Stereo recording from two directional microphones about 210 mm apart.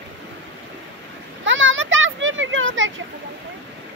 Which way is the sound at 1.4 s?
65° right (ahead or behind).